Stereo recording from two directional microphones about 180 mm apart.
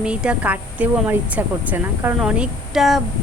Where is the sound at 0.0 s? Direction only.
5° right (ahead or behind).